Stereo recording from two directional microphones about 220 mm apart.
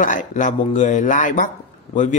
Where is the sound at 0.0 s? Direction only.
35° left (ahead or behind).